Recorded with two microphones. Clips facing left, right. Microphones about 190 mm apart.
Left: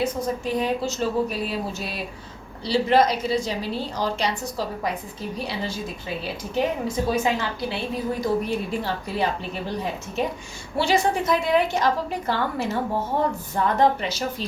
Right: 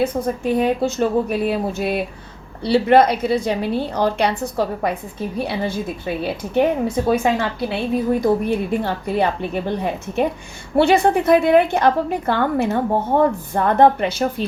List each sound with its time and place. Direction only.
0.0 s a woman's voice: 55° right (ahead or behind)